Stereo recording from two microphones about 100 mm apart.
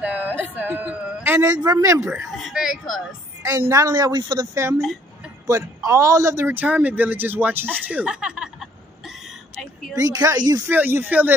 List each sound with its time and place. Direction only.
0.0 s speech: 15° right (ahead or behind)
1.5 s speech: 40° right (ahead or behind)
2.3 s speech: centre (ahead or behind)
3.4 s speech: 35° right (ahead or behind)
3.9 s speech: 45° right (ahead or behind)
4.6 s speech: 30° right (ahead or behind)
6.4 s speech: 20° right (ahead or behind)
9.9 s speech: 35° right (ahead or behind)
10.7 s speech: 20° right (ahead or behind)